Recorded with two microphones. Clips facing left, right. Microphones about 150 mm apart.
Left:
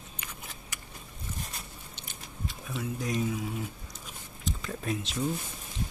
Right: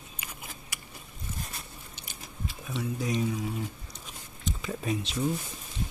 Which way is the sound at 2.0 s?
Centre (ahead or behind).